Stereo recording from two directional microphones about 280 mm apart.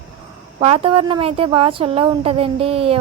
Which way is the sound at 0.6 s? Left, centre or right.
Centre.